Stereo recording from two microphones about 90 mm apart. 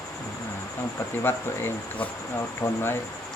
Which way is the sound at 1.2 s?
25° left (ahead or behind).